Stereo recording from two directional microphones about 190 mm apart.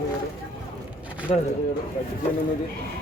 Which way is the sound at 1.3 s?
35° left (ahead or behind).